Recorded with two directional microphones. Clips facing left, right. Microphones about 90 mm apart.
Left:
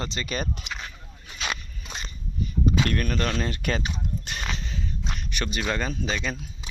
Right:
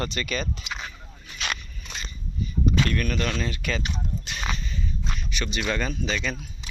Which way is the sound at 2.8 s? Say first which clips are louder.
Even; 35° left (ahead or behind).